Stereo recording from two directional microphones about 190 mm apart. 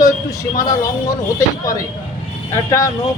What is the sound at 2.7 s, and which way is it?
Speech, 15° left (ahead or behind).